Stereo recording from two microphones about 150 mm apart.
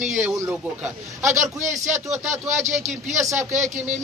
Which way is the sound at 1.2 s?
55° right (ahead or behind).